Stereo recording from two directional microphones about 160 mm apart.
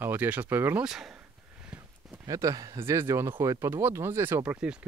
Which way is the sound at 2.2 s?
20° right (ahead or behind).